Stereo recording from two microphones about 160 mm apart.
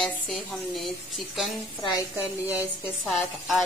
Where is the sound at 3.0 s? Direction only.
Centre (ahead or behind).